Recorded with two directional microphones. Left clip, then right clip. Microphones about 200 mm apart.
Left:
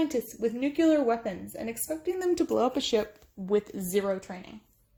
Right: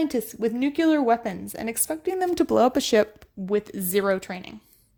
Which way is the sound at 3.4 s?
35° right (ahead or behind).